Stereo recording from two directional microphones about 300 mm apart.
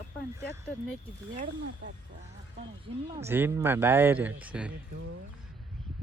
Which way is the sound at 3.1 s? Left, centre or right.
Centre.